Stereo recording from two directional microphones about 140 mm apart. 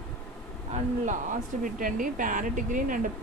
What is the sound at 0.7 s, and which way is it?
Speech, 65° right (ahead or behind).